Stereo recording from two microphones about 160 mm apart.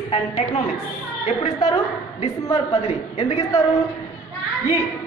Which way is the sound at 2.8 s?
45° left (ahead or behind).